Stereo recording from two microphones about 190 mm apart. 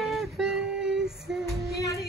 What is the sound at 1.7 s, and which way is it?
Music, 15° left (ahead or behind).